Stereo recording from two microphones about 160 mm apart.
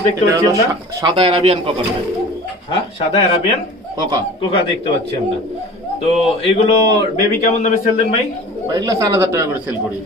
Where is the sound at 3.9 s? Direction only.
25° right (ahead or behind).